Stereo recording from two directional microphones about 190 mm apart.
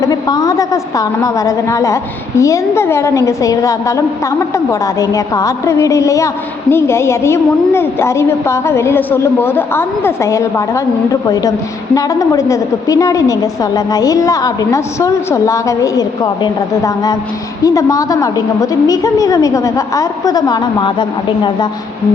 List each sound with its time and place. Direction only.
0.0 s a woman's voice: 20° left (ahead or behind)